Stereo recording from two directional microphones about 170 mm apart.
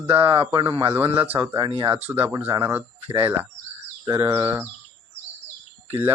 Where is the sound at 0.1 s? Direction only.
30° right (ahead or behind).